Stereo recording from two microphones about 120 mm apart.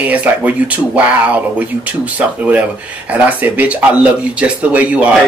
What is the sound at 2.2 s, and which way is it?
Speech, 10° right (ahead or behind).